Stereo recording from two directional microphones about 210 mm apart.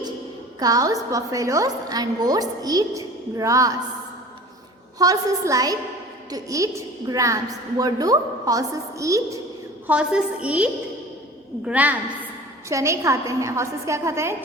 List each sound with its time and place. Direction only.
0.6 s a woman's voice: 15° right (ahead or behind)
4.9 s a woman's voice: 15° right (ahead or behind)